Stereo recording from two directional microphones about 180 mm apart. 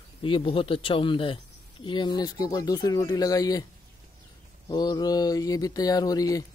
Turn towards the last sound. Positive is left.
turn(degrees=20)  # may be behind; listen again after turning